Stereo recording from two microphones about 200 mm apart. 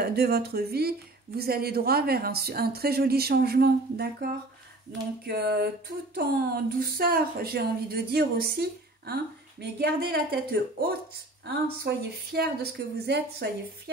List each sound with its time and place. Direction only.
0.0 s speech: 50° right (ahead or behind)